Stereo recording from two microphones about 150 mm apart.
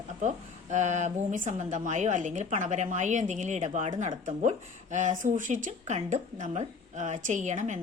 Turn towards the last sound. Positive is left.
turn(degrees=-55)  # may be behind; listen again after turning